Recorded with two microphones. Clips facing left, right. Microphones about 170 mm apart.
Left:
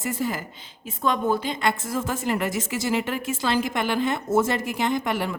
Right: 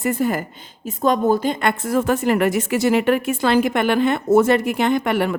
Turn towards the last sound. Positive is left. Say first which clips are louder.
# right 6 dB
turn(degrees=-60)  # may be behind; listen again after turning